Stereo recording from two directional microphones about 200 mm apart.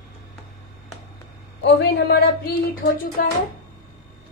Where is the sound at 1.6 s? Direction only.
60° left (ahead or behind).